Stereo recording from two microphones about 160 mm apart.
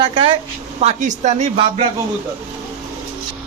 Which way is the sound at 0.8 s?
50° right (ahead or behind).